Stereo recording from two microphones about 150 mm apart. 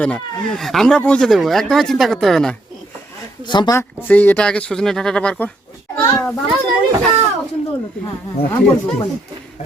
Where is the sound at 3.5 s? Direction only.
30° left (ahead or behind).